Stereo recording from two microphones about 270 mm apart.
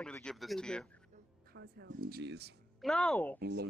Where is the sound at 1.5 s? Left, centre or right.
Right.